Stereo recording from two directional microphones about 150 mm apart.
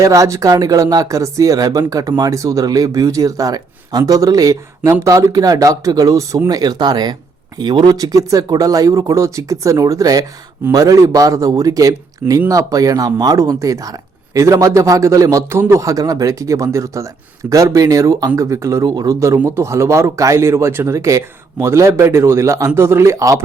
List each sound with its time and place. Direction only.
0.0 s speech: 20° right (ahead or behind)